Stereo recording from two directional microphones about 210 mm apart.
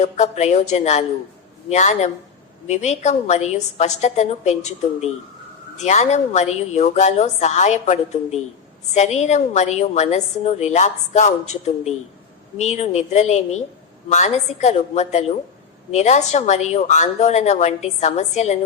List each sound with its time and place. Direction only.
0.0 s a woman's voice: 35° left (ahead or behind)